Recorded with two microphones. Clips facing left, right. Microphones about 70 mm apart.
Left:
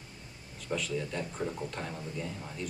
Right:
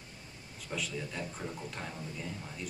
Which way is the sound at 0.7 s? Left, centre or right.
Centre.